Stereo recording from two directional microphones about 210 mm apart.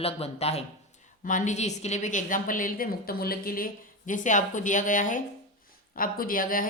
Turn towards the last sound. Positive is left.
turn(degrees=40)  # may be behind; listen again after turning